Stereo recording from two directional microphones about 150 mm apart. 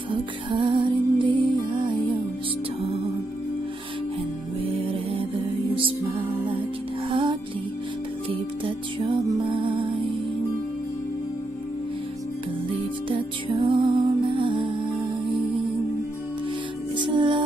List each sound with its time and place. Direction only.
0.1 s music: 35° right (ahead or behind)
5.8 s music: 35° right (ahead or behind)
13.1 s music: 30° right (ahead or behind)
16.9 s music: 30° right (ahead or behind)